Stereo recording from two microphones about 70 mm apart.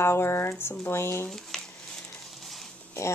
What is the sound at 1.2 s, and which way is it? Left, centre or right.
Speech, centre.